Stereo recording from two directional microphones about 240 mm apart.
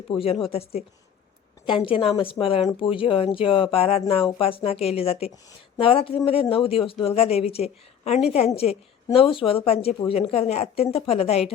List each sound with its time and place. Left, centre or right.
0.1 s speech: left